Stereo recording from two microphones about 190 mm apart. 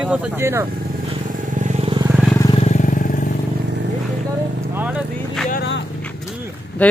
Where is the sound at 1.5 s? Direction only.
40° right (ahead or behind).